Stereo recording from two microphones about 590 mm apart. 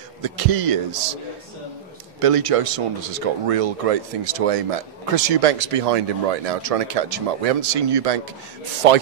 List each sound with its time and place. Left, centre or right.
0.2 s a man's voice: right
2.1 s speech: right